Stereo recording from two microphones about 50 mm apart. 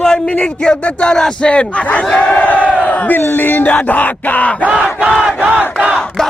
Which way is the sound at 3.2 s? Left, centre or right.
Left.